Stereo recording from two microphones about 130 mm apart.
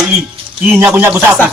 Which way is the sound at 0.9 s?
15° right (ahead or behind).